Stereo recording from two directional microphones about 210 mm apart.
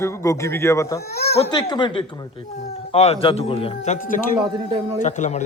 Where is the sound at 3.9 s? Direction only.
40° left (ahead or behind).